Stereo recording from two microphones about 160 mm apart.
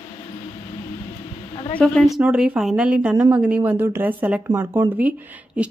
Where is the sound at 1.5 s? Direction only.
30° left (ahead or behind).